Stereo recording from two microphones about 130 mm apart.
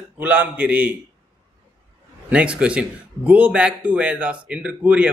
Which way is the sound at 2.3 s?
10° right (ahead or behind).